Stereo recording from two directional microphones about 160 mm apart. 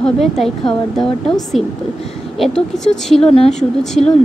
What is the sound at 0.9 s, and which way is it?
Speech, centre (ahead or behind).